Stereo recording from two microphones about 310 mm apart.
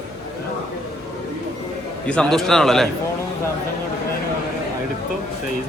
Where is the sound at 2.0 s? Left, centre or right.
Centre.